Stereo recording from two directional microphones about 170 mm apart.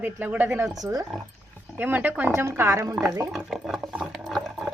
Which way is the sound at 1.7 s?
10° right (ahead or behind).